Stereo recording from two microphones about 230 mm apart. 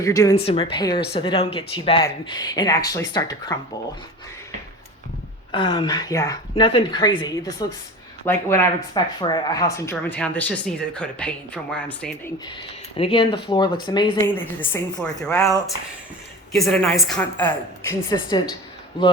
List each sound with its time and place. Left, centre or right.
0.0 s speech: centre
0.3 s a woman's voice: left
5.5 s a woman's voice: left
13.0 s a woman's voice: left
14.3 s speech: centre
16.5 s a woman's voice: centre